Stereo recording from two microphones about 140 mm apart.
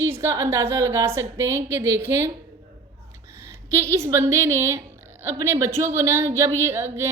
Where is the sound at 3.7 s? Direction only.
20° right (ahead or behind).